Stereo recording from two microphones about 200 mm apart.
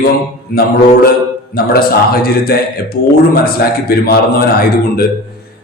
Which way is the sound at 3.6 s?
50° left (ahead or behind).